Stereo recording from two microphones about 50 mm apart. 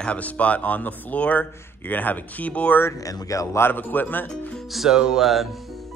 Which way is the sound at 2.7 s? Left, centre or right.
Left.